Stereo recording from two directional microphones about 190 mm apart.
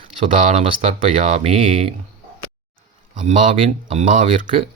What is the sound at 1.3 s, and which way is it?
Speech, 35° right (ahead or behind).